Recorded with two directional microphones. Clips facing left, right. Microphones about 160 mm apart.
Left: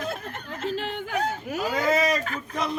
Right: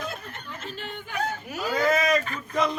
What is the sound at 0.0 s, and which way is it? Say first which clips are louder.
Snicker: left 3 dB; 90° left.